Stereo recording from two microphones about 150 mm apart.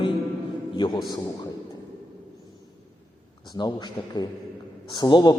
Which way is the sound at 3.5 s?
30° left (ahead or behind).